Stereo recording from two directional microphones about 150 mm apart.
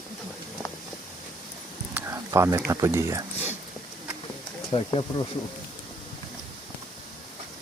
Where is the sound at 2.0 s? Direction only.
20° right (ahead or behind).